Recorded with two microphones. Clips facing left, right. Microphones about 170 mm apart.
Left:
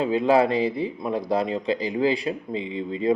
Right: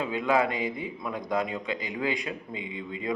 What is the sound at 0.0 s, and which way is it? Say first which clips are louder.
Speech: left 6 dB; 30° left (ahead or behind).